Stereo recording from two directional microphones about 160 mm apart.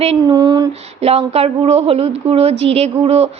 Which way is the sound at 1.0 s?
40° right (ahead or behind).